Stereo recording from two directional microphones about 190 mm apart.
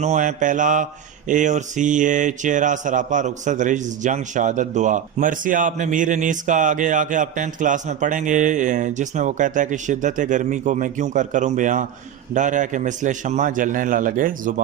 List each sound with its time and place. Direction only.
0.0 s a man's voice: 40° right (ahead or behind)